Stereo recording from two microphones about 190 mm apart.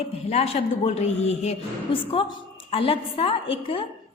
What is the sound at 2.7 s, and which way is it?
A woman's voice, 30° left (ahead or behind).